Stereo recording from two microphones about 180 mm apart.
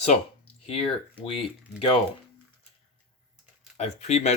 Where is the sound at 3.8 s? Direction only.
40° left (ahead or behind).